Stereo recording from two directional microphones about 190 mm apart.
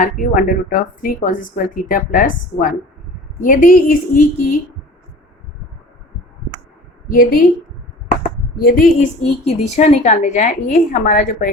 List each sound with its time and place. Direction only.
0.0 s a woman's voice: 45° left (ahead or behind)
7.1 s a woman's voice: 50° left (ahead or behind)